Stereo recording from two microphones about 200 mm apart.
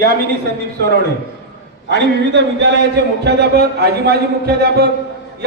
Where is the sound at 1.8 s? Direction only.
60° right (ahead or behind).